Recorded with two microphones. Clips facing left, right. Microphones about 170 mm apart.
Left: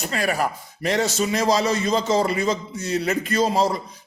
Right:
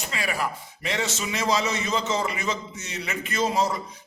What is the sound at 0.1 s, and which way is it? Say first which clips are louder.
A man's voice: left 5 dB; 45° left (ahead or behind).